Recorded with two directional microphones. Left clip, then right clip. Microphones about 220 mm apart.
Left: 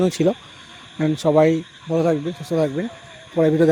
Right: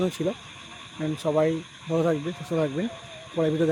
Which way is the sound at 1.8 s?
15° left (ahead or behind).